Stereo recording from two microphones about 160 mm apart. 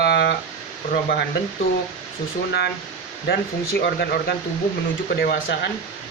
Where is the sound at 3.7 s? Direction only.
80° left.